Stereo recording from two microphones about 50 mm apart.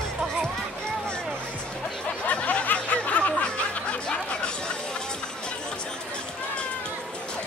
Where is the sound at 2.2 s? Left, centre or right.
Left.